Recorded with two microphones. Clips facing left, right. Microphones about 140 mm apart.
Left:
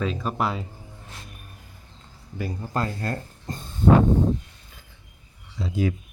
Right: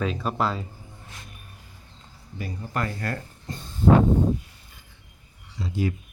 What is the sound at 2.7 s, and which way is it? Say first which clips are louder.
Speech: left 1 dB; 25° left (ahead or behind).